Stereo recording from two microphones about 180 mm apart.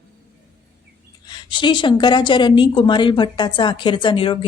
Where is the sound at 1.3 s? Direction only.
25° left (ahead or behind).